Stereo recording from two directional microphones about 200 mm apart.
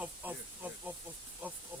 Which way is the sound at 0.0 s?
10° right (ahead or behind).